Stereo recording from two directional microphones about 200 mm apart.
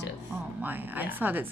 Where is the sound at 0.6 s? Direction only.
10° right (ahead or behind).